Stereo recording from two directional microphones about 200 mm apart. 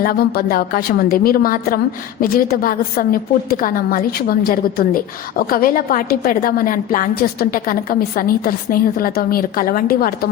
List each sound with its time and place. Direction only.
0.0 s a woman's voice: 50° left (ahead or behind)